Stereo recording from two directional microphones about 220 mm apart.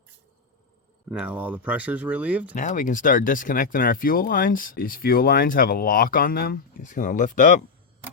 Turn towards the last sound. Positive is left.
turn(degrees=35)  # may be behind; listen again after turning